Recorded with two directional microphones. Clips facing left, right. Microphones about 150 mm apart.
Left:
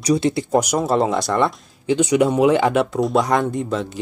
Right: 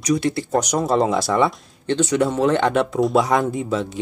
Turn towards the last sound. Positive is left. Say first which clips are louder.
# even
turn(degrees=0)  # may be behind; listen again after turning